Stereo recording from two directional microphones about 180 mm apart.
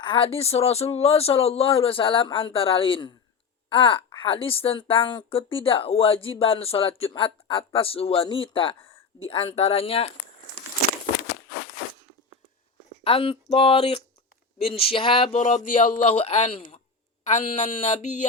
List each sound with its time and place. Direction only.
0.0 s a woman's voice: 30° left (ahead or behind)
13.1 s a woman's voice: 30° left (ahead or behind)
15.4 s speech: 40° left (ahead or behind)